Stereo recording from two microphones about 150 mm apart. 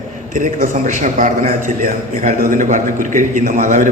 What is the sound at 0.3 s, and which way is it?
A man's voice, 60° right (ahead or behind).